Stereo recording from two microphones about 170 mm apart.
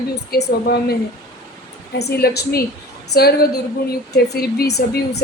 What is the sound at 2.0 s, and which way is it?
A woman's voice, 70° left (ahead or behind).